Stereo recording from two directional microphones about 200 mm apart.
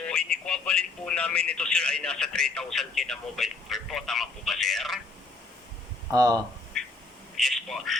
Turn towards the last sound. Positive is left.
turn(degrees=0)  # may be behind; listen again after turning